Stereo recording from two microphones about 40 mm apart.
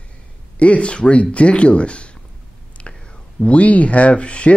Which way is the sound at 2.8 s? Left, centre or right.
Left.